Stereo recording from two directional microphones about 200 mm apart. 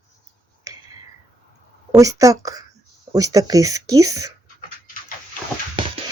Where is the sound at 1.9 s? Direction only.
15° right (ahead or behind).